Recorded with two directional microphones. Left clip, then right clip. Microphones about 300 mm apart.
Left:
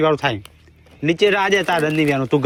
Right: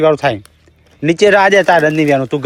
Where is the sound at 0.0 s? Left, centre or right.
Centre.